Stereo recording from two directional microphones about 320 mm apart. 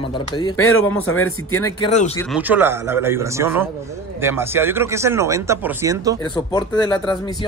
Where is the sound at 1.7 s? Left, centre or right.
Centre.